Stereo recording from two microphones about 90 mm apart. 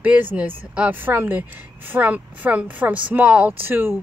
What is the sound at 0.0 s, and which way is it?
A woman's voice, 20° right (ahead or behind).